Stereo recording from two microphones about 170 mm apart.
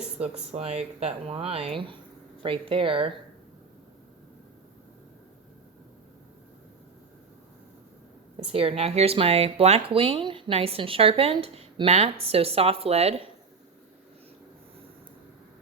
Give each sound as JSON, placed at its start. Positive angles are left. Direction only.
{"t": 0.5, "sound": "speech", "side_deg": -40}
{"t": 8.5, "sound": "speech", "side_deg": -35}